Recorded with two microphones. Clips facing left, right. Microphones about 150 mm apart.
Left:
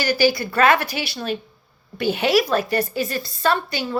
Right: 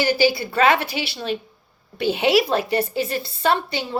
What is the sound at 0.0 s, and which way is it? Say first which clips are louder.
A woman's voice: even; 25° right (ahead or behind).